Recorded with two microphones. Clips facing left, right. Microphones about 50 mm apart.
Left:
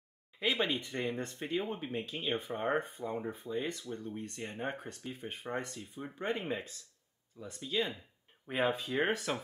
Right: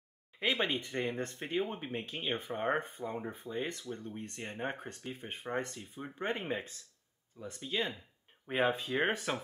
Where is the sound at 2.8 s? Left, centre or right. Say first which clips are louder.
Left 1 dB; right.